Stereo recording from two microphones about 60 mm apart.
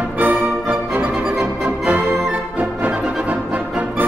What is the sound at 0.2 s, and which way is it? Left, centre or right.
Music, right.